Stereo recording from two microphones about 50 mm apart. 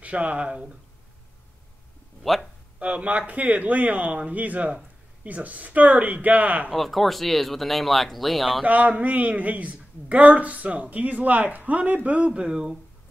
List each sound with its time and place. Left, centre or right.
0.0 s a man's voice: right
2.3 s speech: centre
2.8 s speech: right
6.7 s speech: centre
8.6 s a man's voice: right
12.3 s speech: centre